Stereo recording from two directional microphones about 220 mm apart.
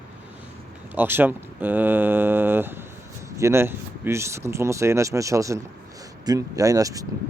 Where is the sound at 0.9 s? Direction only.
10° right (ahead or behind).